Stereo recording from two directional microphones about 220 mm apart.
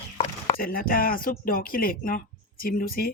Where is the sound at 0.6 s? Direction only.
40° left (ahead or behind).